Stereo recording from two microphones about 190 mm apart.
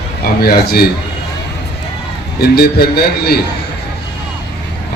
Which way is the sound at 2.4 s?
55° left (ahead or behind).